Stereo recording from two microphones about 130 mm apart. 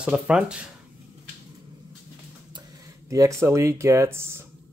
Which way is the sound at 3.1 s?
25° right (ahead or behind).